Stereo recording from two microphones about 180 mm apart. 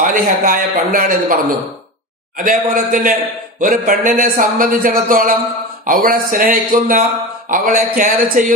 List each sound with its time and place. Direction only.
0.1 s a man's voice: 50° right (ahead or behind)
2.4 s a man's voice: 50° right (ahead or behind)